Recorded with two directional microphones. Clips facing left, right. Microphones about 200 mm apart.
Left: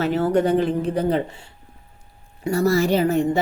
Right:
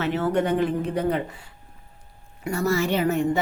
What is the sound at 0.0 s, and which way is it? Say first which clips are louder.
A woman's voice: left 4 dB; 35° left (ahead or behind).